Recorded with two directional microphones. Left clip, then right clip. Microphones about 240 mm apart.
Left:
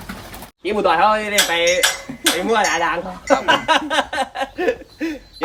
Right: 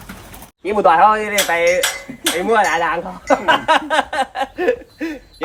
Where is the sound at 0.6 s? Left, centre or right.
Centre.